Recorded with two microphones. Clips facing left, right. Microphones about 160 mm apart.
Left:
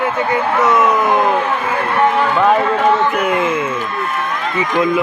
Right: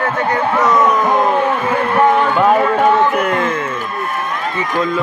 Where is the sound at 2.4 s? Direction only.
10° right (ahead or behind).